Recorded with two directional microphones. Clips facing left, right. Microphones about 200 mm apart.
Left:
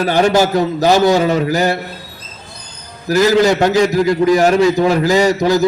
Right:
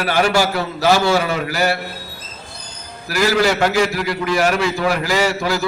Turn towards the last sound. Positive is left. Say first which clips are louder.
# left 6 dB
turn(degrees=20)  # may be behind; listen again after turning